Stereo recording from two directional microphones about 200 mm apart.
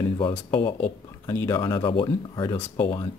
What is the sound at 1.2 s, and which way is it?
Speech, 10° left (ahead or behind).